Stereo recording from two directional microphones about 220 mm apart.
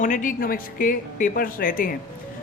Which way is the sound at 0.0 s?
35° left (ahead or behind).